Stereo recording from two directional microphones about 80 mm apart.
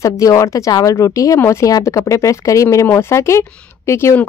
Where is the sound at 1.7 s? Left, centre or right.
Left.